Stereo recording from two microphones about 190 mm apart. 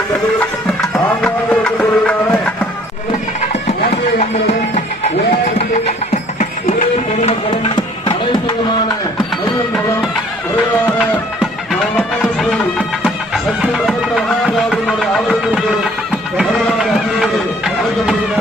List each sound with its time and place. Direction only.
1.2 s music: 5° left (ahead or behind)
8.0 s music: 25° left (ahead or behind)
11.7 s run: centre (ahead or behind)
13.1 s music: centre (ahead or behind)
16.4 s a sound: centre (ahead or behind)